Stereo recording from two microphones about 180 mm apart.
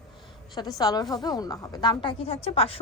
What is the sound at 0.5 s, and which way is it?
A woman's voice, 20° left (ahead or behind).